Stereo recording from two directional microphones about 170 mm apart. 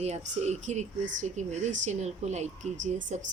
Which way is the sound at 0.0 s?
40° right (ahead or behind).